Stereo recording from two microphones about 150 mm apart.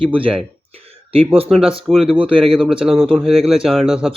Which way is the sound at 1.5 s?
Centre (ahead or behind).